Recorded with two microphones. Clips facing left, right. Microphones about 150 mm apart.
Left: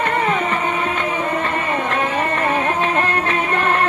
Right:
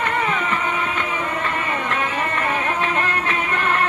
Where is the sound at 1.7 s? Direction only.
40° left (ahead or behind).